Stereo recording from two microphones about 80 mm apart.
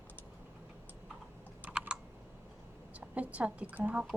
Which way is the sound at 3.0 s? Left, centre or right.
Centre.